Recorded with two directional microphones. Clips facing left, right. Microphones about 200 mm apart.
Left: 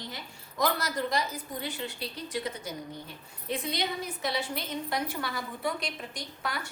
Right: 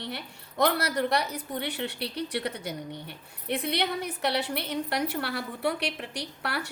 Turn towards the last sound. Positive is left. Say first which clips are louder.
# right 2 dB
turn(degrees=-70)  # may be behind; listen again after turning